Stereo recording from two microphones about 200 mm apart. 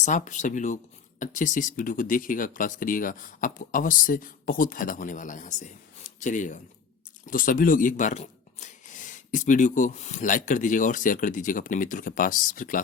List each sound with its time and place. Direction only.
0.0 s speech: 40° left (ahead or behind)